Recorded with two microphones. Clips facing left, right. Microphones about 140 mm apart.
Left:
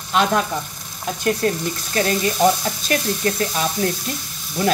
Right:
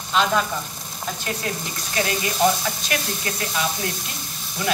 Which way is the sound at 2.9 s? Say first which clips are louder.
Left 10 dB; 40° left (ahead or behind).